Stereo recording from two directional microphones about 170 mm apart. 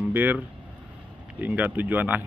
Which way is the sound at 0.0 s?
10° right (ahead or behind).